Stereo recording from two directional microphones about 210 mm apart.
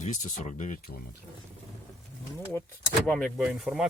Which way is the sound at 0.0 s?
35° left (ahead or behind).